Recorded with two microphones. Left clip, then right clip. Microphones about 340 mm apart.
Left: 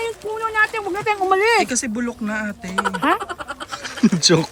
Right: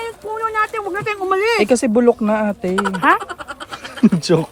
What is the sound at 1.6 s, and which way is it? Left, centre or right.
Speech, centre.